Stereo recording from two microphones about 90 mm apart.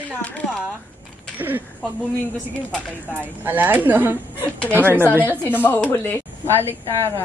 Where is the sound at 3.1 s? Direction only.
20° right (ahead or behind).